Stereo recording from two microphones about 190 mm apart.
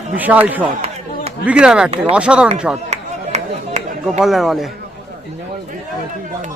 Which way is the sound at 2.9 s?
35° right (ahead or behind).